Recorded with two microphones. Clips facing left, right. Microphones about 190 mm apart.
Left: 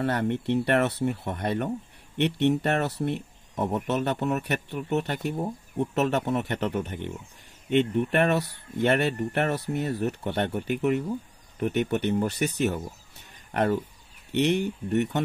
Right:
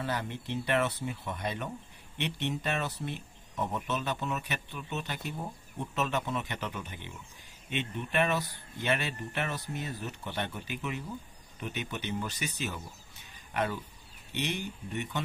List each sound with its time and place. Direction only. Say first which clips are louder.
0.0 s speech: left 9 dB; 65° left (ahead or behind)